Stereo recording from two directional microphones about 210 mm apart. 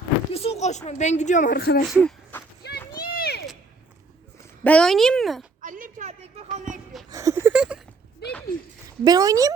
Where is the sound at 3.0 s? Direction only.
45° left (ahead or behind).